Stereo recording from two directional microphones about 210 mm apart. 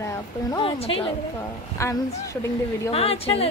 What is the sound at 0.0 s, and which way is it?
A woman's voice, 15° left (ahead or behind).